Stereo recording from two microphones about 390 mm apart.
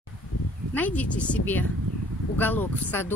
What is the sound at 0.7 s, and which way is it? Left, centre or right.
Speech, centre.